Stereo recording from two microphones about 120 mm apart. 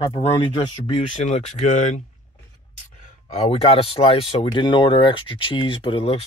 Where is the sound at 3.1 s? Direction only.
65° left (ahead or behind); by 6.2 s 50° left (ahead or behind).